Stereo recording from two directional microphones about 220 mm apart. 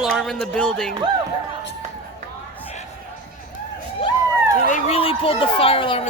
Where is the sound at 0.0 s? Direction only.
Centre (ahead or behind).